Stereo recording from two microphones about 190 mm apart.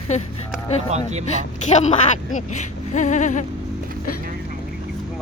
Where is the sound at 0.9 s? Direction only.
35° right (ahead or behind).